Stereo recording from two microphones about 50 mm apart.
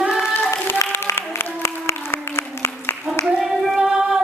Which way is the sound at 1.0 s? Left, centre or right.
Left.